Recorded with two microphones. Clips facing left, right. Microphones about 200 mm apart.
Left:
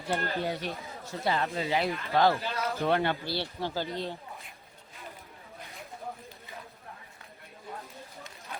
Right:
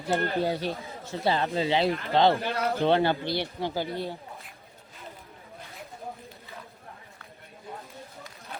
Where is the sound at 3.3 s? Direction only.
15° right (ahead or behind).